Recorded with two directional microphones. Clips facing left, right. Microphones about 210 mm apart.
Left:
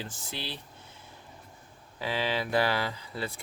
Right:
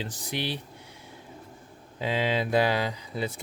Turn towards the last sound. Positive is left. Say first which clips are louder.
# right 4 dB
turn(degrees=-20)  # may be behind; listen again after turning